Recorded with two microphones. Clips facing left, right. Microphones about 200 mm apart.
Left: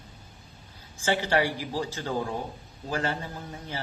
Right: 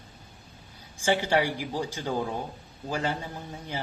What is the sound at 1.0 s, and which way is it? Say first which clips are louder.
A woman's voice: right 1 dB; 15° right (ahead or behind).